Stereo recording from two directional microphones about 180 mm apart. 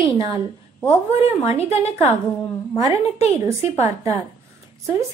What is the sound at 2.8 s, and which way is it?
Speech, 20° right (ahead or behind).